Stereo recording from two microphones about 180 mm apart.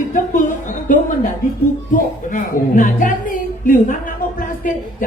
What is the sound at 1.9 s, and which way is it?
A woman's voice, 50° left (ahead or behind).